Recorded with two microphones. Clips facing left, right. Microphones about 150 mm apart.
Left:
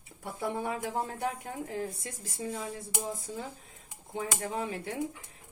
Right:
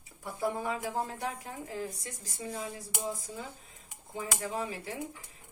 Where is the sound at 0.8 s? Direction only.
45° left (ahead or behind).